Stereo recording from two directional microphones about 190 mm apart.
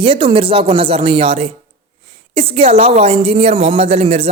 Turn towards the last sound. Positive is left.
turn(degrees=-35)  # may be behind; listen again after turning